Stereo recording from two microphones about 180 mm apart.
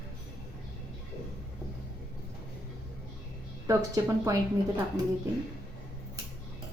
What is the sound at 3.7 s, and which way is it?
Speech, 20° right (ahead or behind).